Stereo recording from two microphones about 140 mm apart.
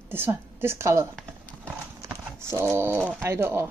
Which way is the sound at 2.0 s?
20° right (ahead or behind).